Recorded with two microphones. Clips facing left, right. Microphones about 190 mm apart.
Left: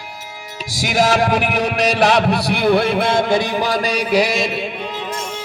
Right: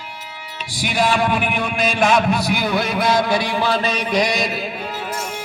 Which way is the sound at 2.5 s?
60° left (ahead or behind).